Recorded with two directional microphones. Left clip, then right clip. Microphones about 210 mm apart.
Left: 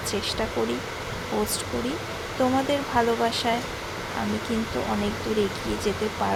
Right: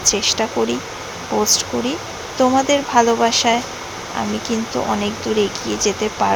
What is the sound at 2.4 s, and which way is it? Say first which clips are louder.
Speech: right 9 dB; 15° right (ahead or behind).